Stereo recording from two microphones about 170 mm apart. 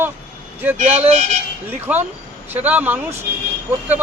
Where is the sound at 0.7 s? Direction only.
45° right (ahead or behind).